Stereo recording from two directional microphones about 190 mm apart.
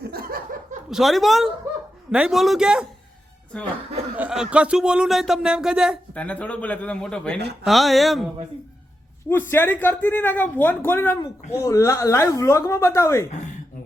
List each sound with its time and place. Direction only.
0.1 s laughter: 50° right (ahead or behind)
0.9 s speech: centre (ahead or behind)
4.2 s speech: 5° right (ahead or behind)
9.5 s speech: 10° left (ahead or behind)